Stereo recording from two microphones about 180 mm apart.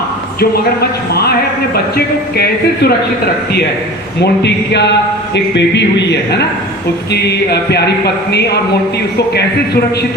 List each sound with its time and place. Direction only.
0.3 s a man's voice: 60° left (ahead or behind)
4.2 s a man's voice: 70° left (ahead or behind)